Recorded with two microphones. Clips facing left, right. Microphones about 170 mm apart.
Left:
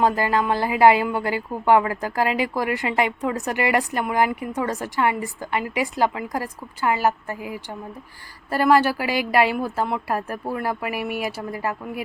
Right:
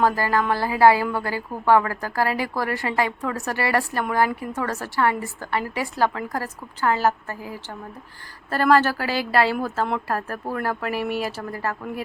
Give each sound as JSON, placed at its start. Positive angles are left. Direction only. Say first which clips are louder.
{"t": 0.0, "sound": "a woman's voice", "louder": "left 1 dB", "side_deg": 20}
{"t": 9.8, "sound": "speech", "louder": "even", "side_deg": 5}
{"t": 10.2, "sound": "a woman's voice", "louder": "left 1 dB", "side_deg": 15}